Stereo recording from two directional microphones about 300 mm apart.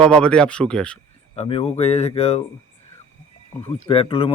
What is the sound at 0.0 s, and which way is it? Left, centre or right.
Speech, centre.